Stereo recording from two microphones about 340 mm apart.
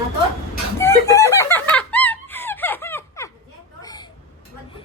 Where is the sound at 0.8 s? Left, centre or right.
Centre.